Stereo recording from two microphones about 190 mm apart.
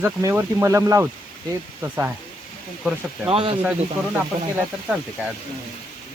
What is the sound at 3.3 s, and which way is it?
Speech, 30° right (ahead or behind).